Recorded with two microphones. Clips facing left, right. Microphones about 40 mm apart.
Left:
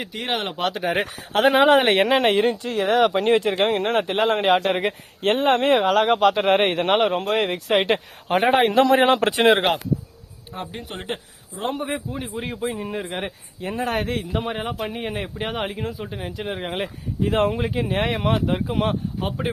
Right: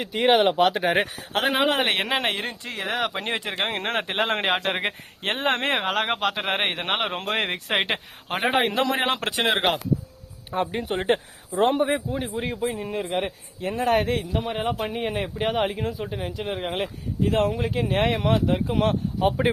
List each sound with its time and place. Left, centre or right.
0.1 s speech: centre
1.3 s speech: centre
3.7 s speech: right; by 7.1 s centre
7.2 s speech: right
7.8 s speech: centre
10.7 s speech: right
11.0 s speech: right
11.9 s speech: centre
17.3 s speech: left
17.7 s speech: centre
19.4 s speech: centre